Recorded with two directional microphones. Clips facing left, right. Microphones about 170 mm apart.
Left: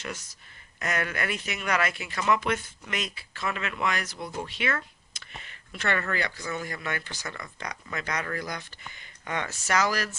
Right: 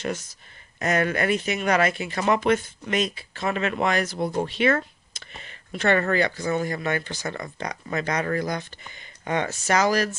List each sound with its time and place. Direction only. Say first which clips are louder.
0.3 s speech: right 2 dB; 30° right (ahead or behind)
4.2 s speech: right 9 dB; 40° right (ahead or behind)
4.5 s speech: right 9 dB; 30° right (ahead or behind)